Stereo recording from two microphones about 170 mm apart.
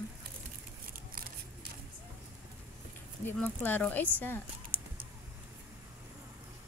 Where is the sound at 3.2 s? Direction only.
10° left (ahead or behind).